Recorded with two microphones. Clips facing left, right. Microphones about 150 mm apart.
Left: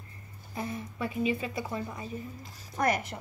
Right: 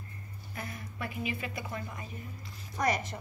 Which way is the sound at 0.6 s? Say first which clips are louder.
Left 6 dB; 25° left (ahead or behind).